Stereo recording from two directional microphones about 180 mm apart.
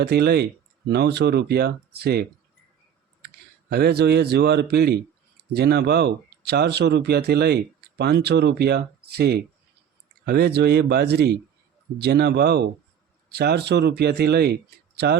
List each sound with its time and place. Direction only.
0.0 s speech: 65° right (ahead or behind)